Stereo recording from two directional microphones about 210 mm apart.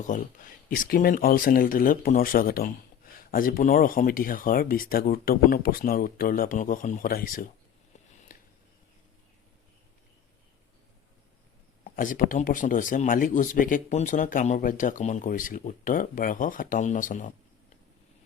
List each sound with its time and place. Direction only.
0.0 s speech: 40° left (ahead or behind)
8.3 s a sound: 40° left (ahead or behind)
11.9 s speech: 40° left (ahead or behind)